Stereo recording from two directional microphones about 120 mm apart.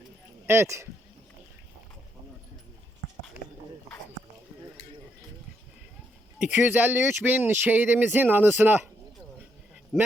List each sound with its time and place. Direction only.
0.4 s speech: 20° right (ahead or behind)
6.4 s speech: 15° right (ahead or behind)
9.9 s speech: 5° left (ahead or behind)